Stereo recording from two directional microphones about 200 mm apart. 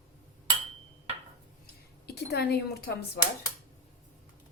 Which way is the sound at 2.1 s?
55° left (ahead or behind).